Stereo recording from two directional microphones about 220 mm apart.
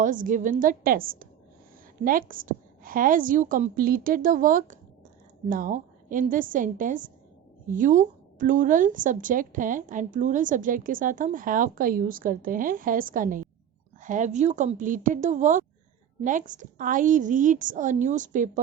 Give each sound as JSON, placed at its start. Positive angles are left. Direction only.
{"t": 0.0, "sound": "a woman's voice", "side_deg": -35}